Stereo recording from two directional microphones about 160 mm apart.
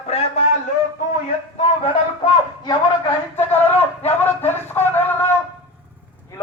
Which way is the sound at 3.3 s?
15° left (ahead or behind).